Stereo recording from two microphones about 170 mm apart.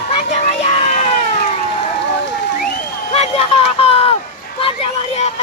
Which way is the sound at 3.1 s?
35° left (ahead or behind).